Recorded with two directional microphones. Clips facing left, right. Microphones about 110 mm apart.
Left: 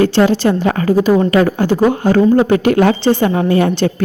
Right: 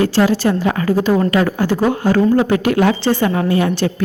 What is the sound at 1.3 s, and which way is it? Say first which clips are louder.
Speech: left 3 dB; 40° left (ahead or behind).